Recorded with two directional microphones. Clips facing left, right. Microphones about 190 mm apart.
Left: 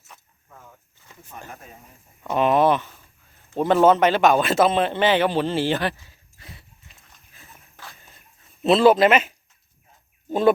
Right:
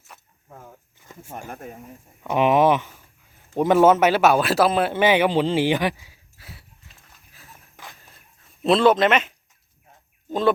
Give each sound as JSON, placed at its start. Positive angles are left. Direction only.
{"t": 0.4, "sound": "a sound", "side_deg": -35}
{"t": 1.3, "sound": "speech", "side_deg": -45}
{"t": 2.2, "sound": "speech", "side_deg": -10}
{"t": 8.6, "sound": "speech", "side_deg": 5}